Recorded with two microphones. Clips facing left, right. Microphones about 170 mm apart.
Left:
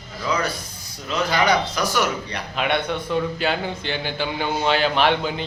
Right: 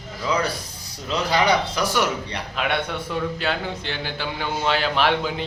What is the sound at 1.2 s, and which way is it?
Speech, 30° right (ahead or behind).